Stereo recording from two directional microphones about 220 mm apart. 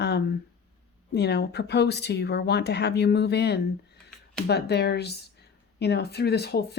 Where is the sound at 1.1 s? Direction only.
50° left (ahead or behind).